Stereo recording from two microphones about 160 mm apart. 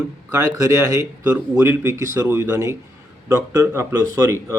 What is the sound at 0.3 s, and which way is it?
A man's voice, 20° right (ahead or behind).